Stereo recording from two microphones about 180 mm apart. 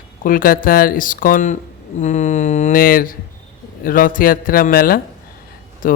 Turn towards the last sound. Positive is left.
turn(degrees=50)  # may be behind; listen again after turning